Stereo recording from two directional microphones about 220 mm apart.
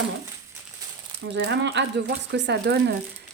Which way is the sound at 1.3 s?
55° right (ahead or behind).